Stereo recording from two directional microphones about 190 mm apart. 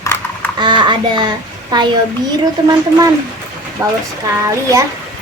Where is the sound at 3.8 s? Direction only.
15° right (ahead or behind).